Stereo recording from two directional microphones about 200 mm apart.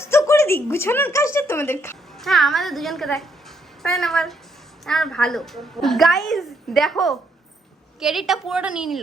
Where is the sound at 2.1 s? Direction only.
Centre (ahead or behind).